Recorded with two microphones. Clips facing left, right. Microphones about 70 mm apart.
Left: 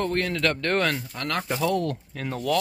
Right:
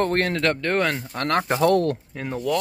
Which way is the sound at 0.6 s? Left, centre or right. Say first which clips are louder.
Right 2 dB; centre.